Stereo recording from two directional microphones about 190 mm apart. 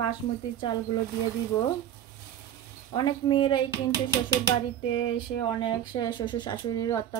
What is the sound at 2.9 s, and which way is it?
Speech, 25° left (ahead or behind).